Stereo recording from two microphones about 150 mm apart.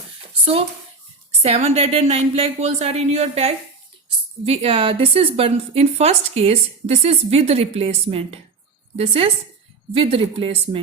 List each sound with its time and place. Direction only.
1.3 s a woman's voice: 45° right (ahead or behind)